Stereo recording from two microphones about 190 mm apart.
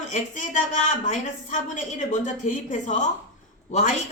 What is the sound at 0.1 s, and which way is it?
A man's voice, 40° left (ahead or behind).